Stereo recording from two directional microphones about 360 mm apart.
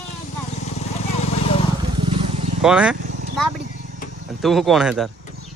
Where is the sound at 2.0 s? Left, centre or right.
Centre.